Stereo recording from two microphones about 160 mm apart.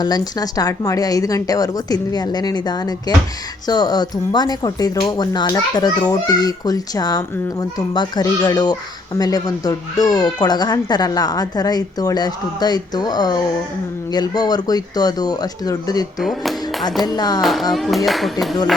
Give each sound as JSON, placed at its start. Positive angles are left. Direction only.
{"t": 0.0, "sound": "speech", "side_deg": 25}
{"t": 16.2, "sound": "speech", "side_deg": 0}
{"t": 17.2, "sound": "speech", "side_deg": 25}
{"t": 17.4, "sound": "speech", "side_deg": 0}